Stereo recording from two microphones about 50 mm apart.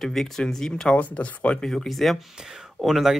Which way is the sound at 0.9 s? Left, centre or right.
Left.